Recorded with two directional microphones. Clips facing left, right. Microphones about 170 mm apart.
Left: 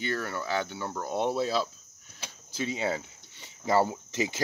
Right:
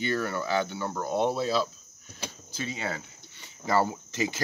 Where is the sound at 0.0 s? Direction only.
Centre (ahead or behind).